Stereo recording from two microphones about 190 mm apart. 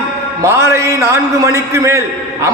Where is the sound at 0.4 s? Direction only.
15° right (ahead or behind).